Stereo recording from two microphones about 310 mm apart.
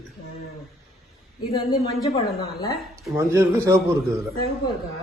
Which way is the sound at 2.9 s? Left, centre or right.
Centre.